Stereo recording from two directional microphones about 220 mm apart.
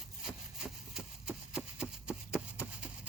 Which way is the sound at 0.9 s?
5° right (ahead or behind).